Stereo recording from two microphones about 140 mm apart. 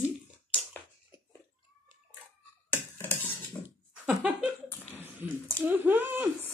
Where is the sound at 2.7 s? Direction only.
15° left (ahead or behind).